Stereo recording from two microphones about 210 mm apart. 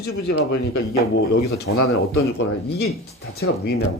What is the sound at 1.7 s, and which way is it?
Speech, 65° left (ahead or behind).